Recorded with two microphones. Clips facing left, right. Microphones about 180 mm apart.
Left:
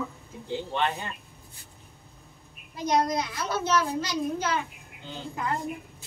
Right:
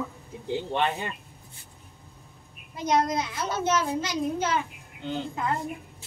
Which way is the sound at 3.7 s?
25° right (ahead or behind).